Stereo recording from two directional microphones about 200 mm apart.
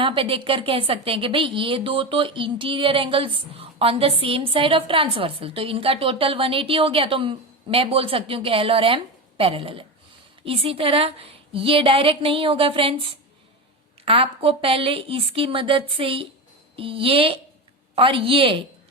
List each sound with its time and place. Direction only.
0.0 s speech: 25° right (ahead or behind)